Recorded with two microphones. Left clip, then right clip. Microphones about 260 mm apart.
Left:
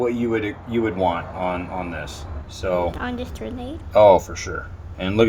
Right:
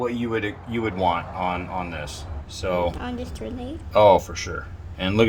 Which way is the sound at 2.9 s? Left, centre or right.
Centre.